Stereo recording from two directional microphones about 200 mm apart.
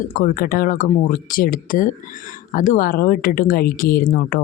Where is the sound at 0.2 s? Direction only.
45° left (ahead or behind).